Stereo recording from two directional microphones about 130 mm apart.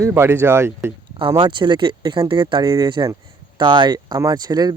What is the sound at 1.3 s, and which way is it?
Speech, 35° right (ahead or behind).